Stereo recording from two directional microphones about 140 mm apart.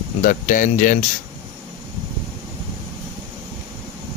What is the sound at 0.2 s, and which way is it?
Speech, 75° left (ahead or behind).